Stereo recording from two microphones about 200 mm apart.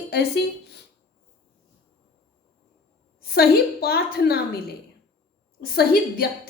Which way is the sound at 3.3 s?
50° left (ahead or behind).